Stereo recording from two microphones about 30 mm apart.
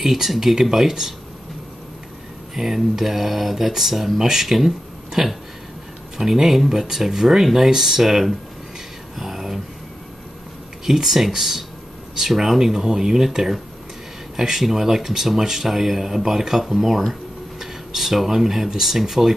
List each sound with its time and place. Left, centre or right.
0.0 s speech: centre
2.5 s speech: centre
9.2 s a sound: centre
10.9 s speech: centre